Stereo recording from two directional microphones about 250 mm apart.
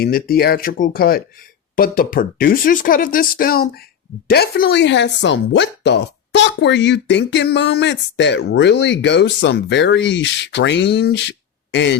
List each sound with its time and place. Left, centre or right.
0.0 s speech: left